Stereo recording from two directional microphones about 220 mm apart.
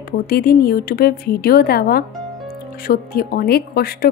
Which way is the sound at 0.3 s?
40° left (ahead or behind).